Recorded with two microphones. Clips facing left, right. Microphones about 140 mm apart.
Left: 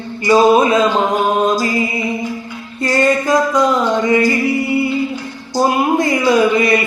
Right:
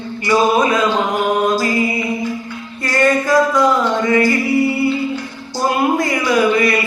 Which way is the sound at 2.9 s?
20° left (ahead or behind).